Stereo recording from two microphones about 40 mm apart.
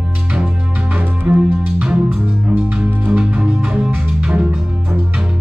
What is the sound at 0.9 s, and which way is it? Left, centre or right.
Music, right.